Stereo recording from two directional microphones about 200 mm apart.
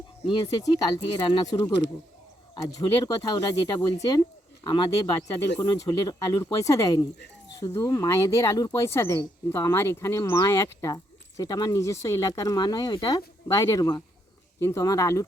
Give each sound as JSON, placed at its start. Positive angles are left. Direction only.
{"t": 0.2, "sound": "speech", "side_deg": 25}
{"t": 2.7, "sound": "speech", "side_deg": 20}